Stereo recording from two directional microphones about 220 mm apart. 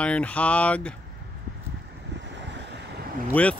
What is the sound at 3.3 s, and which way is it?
Speech, 5° left (ahead or behind).